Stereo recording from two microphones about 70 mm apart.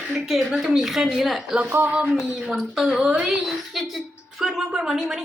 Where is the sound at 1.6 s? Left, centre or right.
Right.